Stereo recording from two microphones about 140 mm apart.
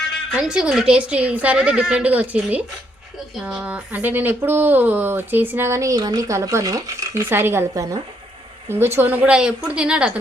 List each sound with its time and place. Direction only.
0.3 s speech: 5° right (ahead or behind)